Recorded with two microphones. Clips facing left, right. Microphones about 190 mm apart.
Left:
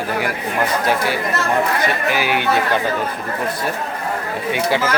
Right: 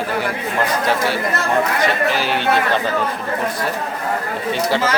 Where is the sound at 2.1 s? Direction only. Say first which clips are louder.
Left 1 dB; 10° left (ahead or behind).